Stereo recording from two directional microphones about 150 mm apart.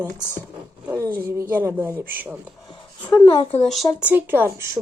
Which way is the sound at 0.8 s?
15° right (ahead or behind).